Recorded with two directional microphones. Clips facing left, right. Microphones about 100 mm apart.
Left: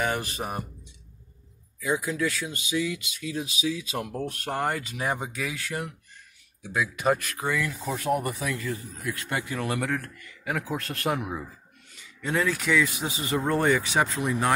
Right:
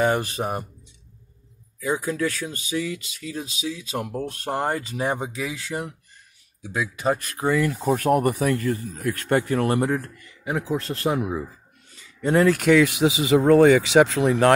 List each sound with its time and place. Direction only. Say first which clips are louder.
0.0 s speech: right 7 dB; 35° right (ahead or behind)
1.9 s speech: right 2 dB; 40° right (ahead or behind)
7.8 s speech: right 8 dB; 55° right (ahead or behind)
9.8 s speech: right 6 dB; 25° right (ahead or behind)
12.2 s speech: right 8 dB; 50° right (ahead or behind); by 14.5 s 90° right